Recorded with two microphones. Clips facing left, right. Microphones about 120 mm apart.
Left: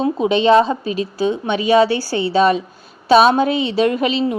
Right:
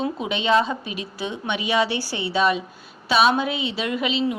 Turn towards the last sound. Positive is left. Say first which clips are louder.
# left 6 dB
turn(degrees=45)  # may be behind; listen again after turning